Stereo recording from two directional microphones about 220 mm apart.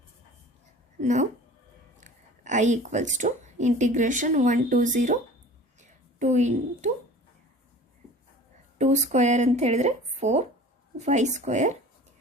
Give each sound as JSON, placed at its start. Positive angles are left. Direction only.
{"t": 0.9, "sound": "a woman's voice", "side_deg": -30}
{"t": 6.1, "sound": "speech", "side_deg": -30}
{"t": 8.8, "sound": "speech", "side_deg": -30}